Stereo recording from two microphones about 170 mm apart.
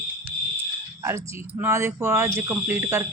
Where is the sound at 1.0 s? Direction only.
15° right (ahead or behind).